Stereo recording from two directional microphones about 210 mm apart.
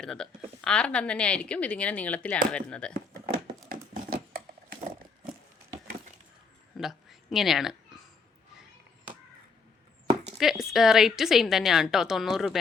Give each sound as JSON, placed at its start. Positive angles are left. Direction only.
{"t": 0.0, "sound": "a woman's voice", "side_deg": 0}
{"t": 3.7, "sound": "a sound", "side_deg": -40}
{"t": 6.7, "sound": "speech", "side_deg": 0}
{"t": 10.3, "sound": "a woman's voice", "side_deg": 0}